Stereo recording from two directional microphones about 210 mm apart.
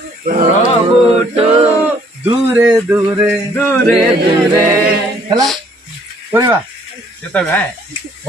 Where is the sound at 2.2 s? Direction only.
5° right (ahead or behind).